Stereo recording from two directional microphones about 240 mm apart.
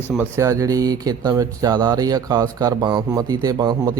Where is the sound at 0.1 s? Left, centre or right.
Centre.